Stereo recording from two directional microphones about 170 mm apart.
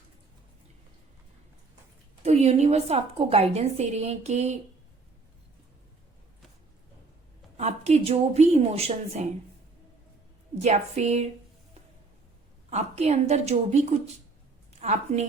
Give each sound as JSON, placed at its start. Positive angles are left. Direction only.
{"t": 2.2, "sound": "a woman's voice", "side_deg": -40}
{"t": 7.5, "sound": "a woman's voice", "side_deg": -40}
{"t": 10.6, "sound": "a woman's voice", "side_deg": -40}
{"t": 12.7, "sound": "a woman's voice", "side_deg": -40}